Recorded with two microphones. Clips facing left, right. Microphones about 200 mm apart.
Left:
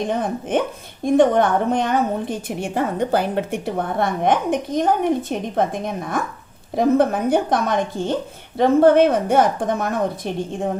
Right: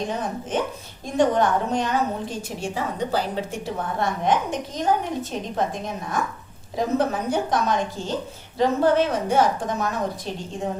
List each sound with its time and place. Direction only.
0.1 s a woman's voice: 55° left (ahead or behind)